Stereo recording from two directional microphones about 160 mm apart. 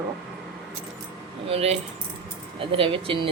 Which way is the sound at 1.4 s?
40° right (ahead or behind).